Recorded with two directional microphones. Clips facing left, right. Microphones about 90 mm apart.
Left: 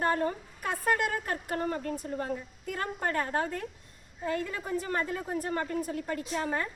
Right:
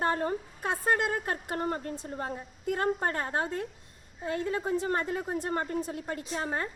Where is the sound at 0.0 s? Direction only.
30° right (ahead or behind).